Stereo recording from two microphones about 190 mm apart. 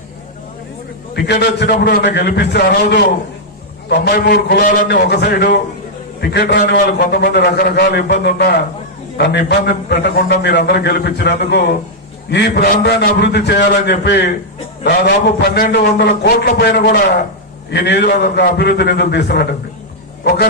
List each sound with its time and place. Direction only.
1.1 s a man's voice: 60° left (ahead or behind)